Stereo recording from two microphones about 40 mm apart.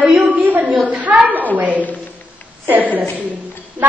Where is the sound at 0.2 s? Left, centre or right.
Right.